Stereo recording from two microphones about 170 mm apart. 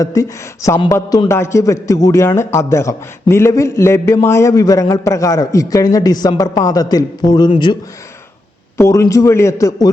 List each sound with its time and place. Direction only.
0.0 s a man's voice: 20° left (ahead or behind)
8.8 s a man's voice: 15° left (ahead or behind)